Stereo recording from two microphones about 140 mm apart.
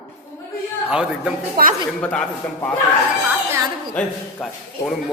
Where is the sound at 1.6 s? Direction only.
90° right.